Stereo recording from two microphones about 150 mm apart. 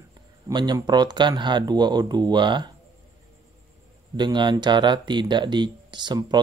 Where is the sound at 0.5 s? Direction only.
30° right (ahead or behind).